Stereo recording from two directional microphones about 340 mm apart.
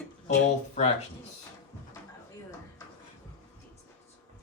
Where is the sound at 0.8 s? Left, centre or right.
Centre.